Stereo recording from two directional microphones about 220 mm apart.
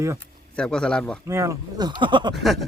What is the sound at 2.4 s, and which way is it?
Speech, centre (ahead or behind).